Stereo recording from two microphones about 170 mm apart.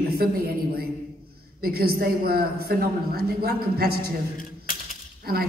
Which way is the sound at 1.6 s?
65° right (ahead or behind).